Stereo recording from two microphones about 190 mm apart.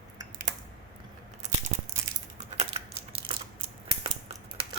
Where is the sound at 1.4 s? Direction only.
35° right (ahead or behind).